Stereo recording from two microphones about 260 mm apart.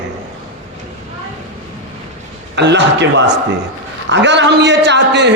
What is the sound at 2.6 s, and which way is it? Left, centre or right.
A man's voice, right.